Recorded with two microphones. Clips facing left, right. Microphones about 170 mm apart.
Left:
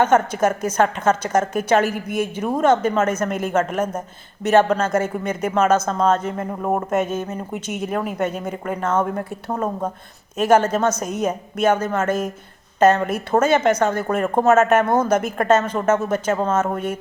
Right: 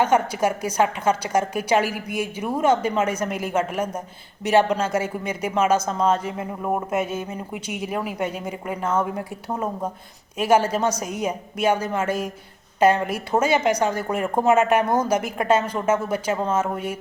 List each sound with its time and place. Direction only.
0.0 s a woman's voice: 10° right (ahead or behind)
6.3 s speech: 50° left (ahead or behind)
6.9 s a woman's voice: 10° right (ahead or behind)